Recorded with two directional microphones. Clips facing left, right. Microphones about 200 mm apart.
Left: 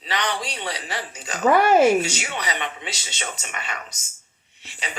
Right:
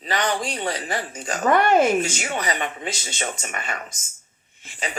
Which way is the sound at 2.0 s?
45° right (ahead or behind).